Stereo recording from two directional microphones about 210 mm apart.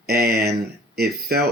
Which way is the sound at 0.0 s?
50° right (ahead or behind).